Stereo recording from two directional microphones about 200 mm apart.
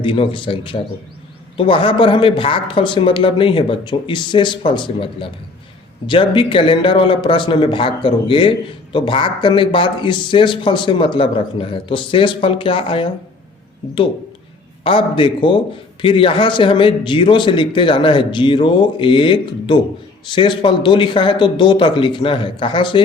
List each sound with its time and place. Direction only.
0.0 s a man's voice: 25° left (ahead or behind)
14.8 s a man's voice: 25° left (ahead or behind)